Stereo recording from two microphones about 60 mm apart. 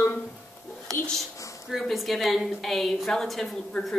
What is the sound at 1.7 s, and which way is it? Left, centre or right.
Speech, centre.